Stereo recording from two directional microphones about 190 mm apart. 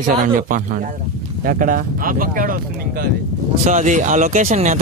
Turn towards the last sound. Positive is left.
turn(degrees=-40)  # may be behind; listen again after turning